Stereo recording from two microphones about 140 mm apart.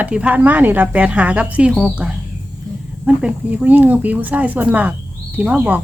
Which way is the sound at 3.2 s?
10° right (ahead or behind).